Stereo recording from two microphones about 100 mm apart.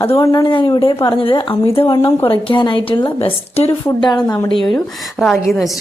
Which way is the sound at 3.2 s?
90° left.